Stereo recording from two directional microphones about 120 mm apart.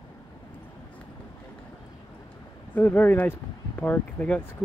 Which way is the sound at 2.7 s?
15° left (ahead or behind).